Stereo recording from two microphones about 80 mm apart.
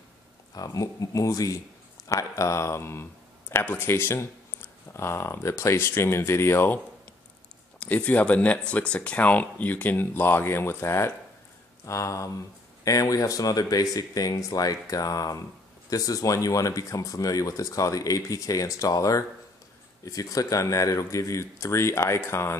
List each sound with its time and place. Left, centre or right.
0.6 s speech: left
7.8 s speech: centre